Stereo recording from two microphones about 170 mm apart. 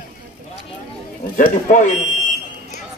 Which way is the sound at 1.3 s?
50° left (ahead or behind).